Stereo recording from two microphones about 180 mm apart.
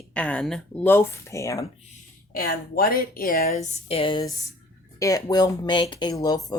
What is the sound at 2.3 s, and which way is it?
A woman's voice, 55° left (ahead or behind).